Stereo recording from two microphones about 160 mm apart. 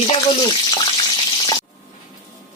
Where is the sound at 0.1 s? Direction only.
30° left (ahead or behind).